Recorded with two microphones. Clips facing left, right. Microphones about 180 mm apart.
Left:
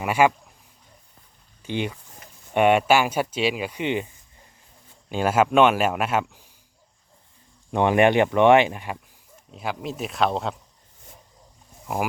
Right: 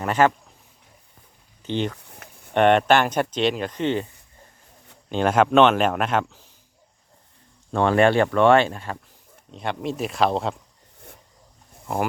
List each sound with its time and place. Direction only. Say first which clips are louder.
0.0 s speech: even; 10° left (ahead or behind)
1.6 s speech: right 2 dB; 10° left (ahead or behind)
7.7 s speech: even; 15° left (ahead or behind)
9.5 s speech: right 2 dB; 5° left (ahead or behind)